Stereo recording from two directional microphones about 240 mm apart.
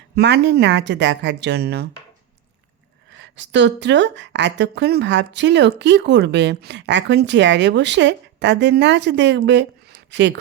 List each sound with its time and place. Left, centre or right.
0.2 s a woman's voice: right
3.2 s a woman's voice: right